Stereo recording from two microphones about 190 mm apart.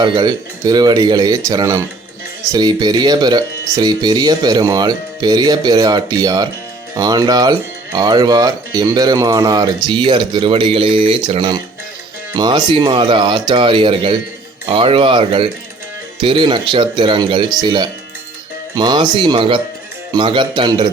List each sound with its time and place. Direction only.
0.0 s speech: 25° right (ahead or behind)